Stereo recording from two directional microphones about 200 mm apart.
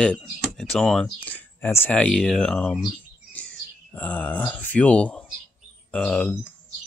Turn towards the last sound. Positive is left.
turn(degrees=5)  # may be behind; listen again after turning